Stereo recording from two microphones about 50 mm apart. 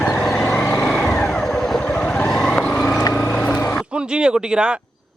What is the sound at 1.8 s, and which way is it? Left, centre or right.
Vehicle, left.